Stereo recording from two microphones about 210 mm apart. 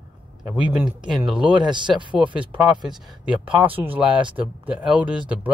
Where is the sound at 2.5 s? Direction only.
5° right (ahead or behind).